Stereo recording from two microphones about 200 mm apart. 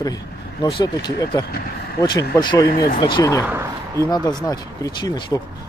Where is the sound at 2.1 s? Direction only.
20° left (ahead or behind).